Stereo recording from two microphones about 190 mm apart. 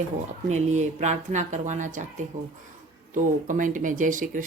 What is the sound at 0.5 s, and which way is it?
Speech, 40° right (ahead or behind).